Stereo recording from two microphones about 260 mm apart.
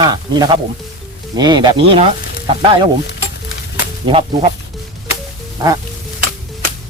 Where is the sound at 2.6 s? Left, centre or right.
Right.